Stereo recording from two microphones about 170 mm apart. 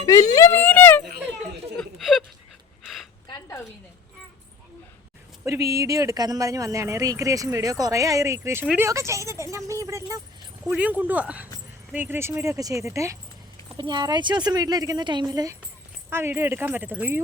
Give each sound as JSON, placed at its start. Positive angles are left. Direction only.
{"t": 0.0, "sound": "speech", "side_deg": 20}
{"t": 1.3, "sound": "a sound", "side_deg": 5}
{"t": 3.2, "sound": "a sound", "side_deg": 25}
{"t": 5.5, "sound": "speech", "side_deg": -20}
{"t": 8.9, "sound": "speech", "side_deg": -15}
{"t": 10.6, "sound": "speech", "side_deg": -5}